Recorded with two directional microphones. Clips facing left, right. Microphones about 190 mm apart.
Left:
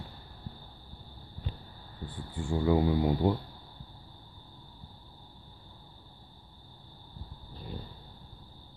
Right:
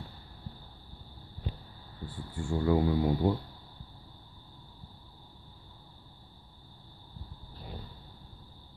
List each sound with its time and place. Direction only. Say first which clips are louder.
2.3 s speech: left 1 dB; 15° left (ahead or behind)